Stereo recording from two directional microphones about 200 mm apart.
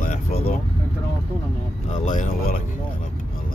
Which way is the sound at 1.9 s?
35° left (ahead or behind).